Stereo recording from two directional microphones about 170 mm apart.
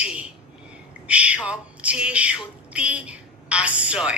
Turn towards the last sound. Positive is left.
turn(degrees=-5)  # may be behind; listen again after turning